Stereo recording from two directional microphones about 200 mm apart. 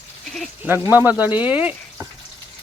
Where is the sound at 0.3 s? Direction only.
10° right (ahead or behind).